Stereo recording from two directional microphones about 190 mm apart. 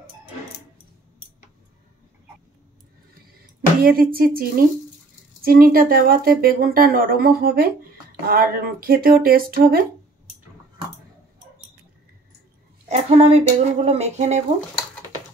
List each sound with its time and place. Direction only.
3.8 s speech: 50° right (ahead or behind)
12.8 s speech: 35° right (ahead or behind)